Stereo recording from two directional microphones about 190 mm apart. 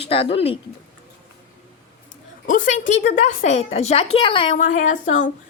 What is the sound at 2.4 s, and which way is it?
A woman's voice, 45° left (ahead or behind).